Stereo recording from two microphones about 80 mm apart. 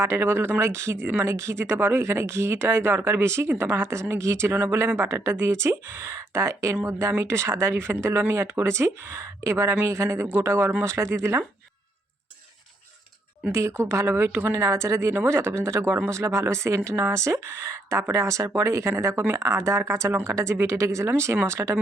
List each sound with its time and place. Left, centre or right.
0.0 s speech: right
13.5 s speech: right